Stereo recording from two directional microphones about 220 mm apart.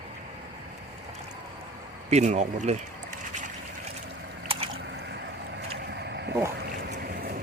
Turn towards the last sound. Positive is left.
turn(degrees=-45)  # may be behind; listen again after turning